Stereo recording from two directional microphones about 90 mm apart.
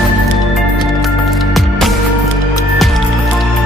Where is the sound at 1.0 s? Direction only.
Centre (ahead or behind).